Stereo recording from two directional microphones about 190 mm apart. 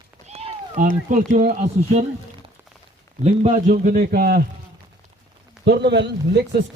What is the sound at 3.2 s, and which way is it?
A man's voice, 40° right (ahead or behind).